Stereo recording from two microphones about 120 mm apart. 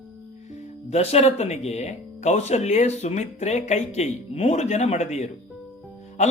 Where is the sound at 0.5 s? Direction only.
60° left (ahead or behind).